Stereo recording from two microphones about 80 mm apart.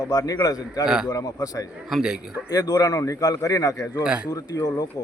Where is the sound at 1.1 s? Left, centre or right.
Left.